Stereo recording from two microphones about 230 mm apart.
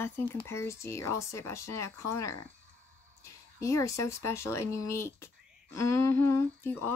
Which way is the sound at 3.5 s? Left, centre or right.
Centre.